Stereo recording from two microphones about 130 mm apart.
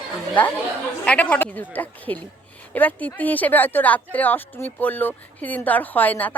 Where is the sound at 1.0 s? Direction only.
10° left (ahead or behind).